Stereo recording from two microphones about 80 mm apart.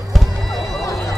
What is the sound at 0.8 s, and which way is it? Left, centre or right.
Run, left.